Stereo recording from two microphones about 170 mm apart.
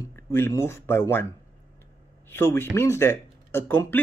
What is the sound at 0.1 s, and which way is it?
Speech, 15° left (ahead or behind).